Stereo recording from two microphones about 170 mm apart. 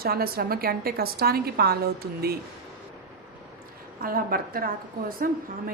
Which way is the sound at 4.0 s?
55° right (ahead or behind).